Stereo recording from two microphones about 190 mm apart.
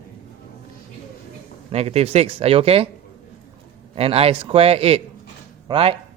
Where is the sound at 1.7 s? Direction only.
35° right (ahead or behind).